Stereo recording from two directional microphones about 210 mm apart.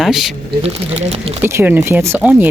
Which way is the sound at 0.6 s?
30° right (ahead or behind).